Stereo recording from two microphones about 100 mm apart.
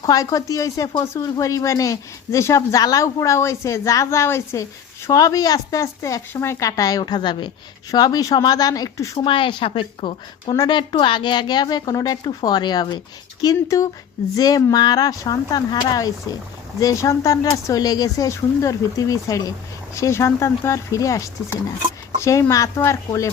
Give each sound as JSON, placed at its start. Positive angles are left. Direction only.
{"t": 0.0, "sound": "speech", "side_deg": 40}
{"t": 5.1, "sound": "speech", "side_deg": 40}
{"t": 7.9, "sound": "speech", "side_deg": 40}
{"t": 9.1, "sound": "speech", "side_deg": 60}